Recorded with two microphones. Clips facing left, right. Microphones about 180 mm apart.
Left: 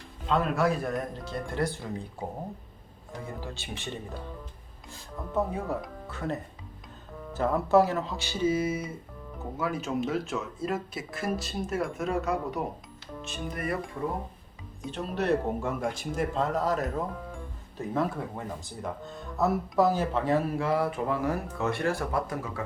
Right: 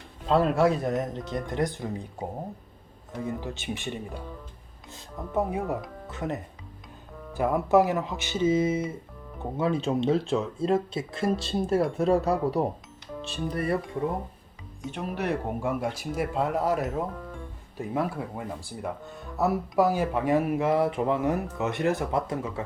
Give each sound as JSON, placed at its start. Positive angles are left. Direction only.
{"t": 0.3, "sound": "speech", "side_deg": -30}
{"t": 3.4, "sound": "speech", "side_deg": -20}
{"t": 13.2, "sound": "music", "side_deg": -35}
{"t": 14.8, "sound": "speech", "side_deg": -15}
{"t": 19.4, "sound": "speech", "side_deg": -15}